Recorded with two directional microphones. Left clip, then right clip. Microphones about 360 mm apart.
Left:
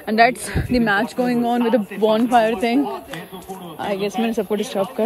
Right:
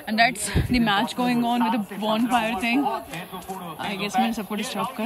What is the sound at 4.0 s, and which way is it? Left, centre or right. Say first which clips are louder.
A woman's voice: right 1 dB; centre.